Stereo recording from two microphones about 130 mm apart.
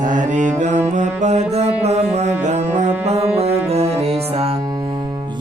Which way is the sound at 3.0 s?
50° right (ahead or behind).